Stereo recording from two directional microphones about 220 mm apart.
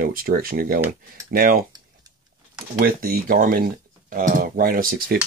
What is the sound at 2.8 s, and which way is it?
Speech, 40° right (ahead or behind).